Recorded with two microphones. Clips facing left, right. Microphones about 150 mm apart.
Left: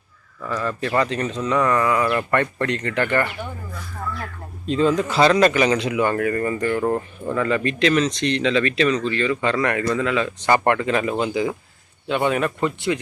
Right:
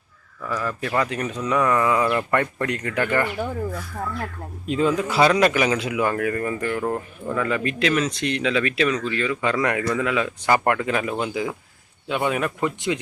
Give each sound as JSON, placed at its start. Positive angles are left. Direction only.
{"t": 0.4, "sound": "speech", "side_deg": -5}
{"t": 4.6, "sound": "speech", "side_deg": -10}